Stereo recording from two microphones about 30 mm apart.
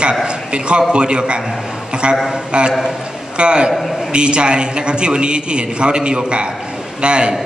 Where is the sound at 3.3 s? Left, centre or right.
Right.